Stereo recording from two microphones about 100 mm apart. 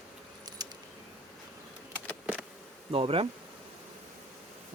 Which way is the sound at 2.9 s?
65° right (ahead or behind).